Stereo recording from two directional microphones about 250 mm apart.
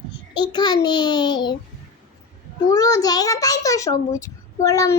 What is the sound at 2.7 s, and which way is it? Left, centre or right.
Child singing, centre.